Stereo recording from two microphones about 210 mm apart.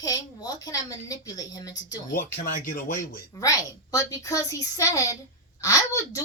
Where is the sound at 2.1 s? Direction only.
45° left (ahead or behind).